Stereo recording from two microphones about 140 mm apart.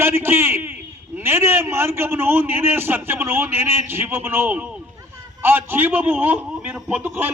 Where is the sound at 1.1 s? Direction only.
15° right (ahead or behind).